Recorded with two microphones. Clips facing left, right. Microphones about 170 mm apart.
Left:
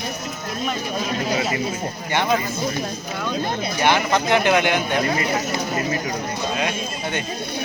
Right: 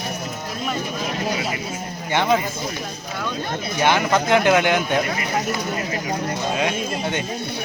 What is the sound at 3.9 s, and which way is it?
Speech, 20° left (ahead or behind).